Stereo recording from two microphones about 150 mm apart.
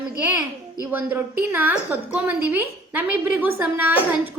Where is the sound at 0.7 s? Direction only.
10° right (ahead or behind).